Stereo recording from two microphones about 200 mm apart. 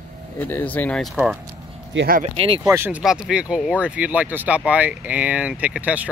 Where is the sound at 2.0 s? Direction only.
45° right (ahead or behind).